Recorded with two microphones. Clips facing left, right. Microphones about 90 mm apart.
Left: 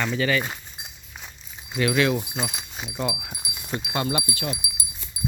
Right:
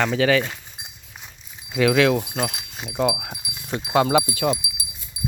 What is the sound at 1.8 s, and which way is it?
Speech, 90° right.